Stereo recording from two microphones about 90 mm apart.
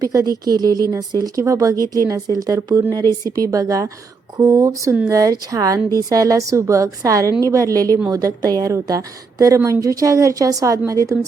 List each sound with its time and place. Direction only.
0.0 s speech: 40° right (ahead or behind)